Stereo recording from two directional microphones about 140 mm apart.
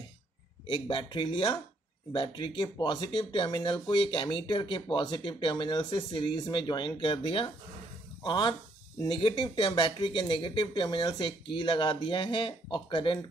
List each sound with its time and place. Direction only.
0.7 s speech: 40° left (ahead or behind)